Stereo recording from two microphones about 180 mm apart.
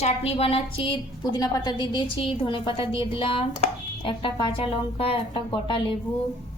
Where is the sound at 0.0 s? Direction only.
35° left (ahead or behind).